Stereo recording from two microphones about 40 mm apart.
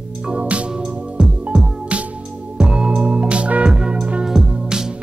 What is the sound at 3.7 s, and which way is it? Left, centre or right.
Music, centre.